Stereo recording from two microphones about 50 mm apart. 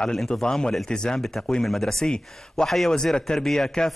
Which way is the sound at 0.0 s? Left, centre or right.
Centre.